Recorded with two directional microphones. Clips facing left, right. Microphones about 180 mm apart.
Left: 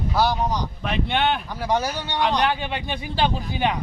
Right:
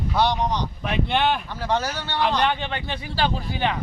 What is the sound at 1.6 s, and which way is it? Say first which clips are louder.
Speech: left 1 dB; 10° left (ahead or behind).